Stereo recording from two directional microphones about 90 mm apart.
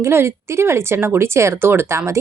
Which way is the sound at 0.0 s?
30° right (ahead or behind).